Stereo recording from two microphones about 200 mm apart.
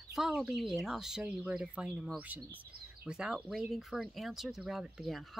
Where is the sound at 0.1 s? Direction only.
Centre (ahead or behind).